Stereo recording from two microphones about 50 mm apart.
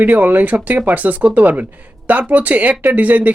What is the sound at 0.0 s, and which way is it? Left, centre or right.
Speech, right.